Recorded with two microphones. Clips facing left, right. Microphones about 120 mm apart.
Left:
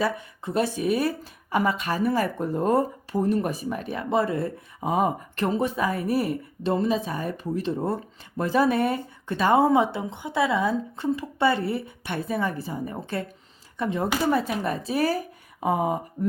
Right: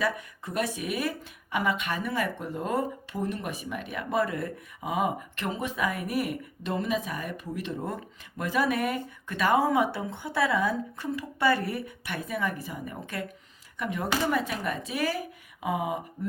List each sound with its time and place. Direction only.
0.0 s speech: 30° left (ahead or behind)